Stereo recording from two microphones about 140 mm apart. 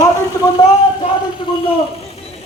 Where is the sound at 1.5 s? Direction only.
35° left (ahead or behind).